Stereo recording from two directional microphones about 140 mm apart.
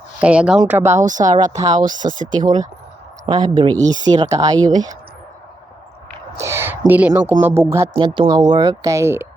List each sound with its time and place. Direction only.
0.2 s speech: 10° right (ahead or behind)
0.6 s speech: 20° right (ahead or behind)
0.9 s speech: 65° right (ahead or behind)
1.5 s speech: 25° right (ahead or behind)
1.8 s speech: 70° right (ahead or behind)
3.2 s speech: 30° right (ahead or behind)
6.4 s speech: 20° right (ahead or behind)
7.6 s speech: 30° right (ahead or behind)